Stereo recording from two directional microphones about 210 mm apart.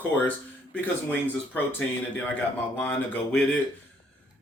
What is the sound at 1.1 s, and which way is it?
Speech, 10° left (ahead or behind).